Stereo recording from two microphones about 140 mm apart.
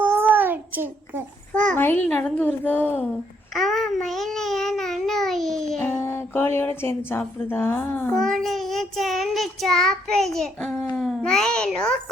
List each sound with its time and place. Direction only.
0.0 s a sound: 15° right (ahead or behind)
1.7 s a child's voice: 15° left (ahead or behind)
3.5 s babbling: centre (ahead or behind)
5.9 s a woman's voice: 20° left (ahead or behind)